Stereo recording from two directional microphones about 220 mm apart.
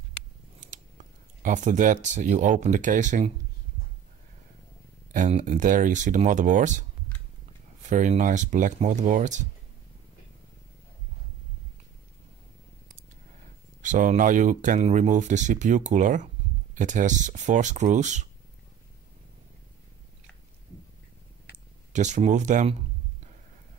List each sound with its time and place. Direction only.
1.4 s speech: 35° right (ahead or behind)
5.1 s speech: 35° right (ahead or behind)
7.9 s speech: 35° right (ahead or behind)
13.8 s speech: 35° right (ahead or behind)
21.9 s speech: 30° right (ahead or behind)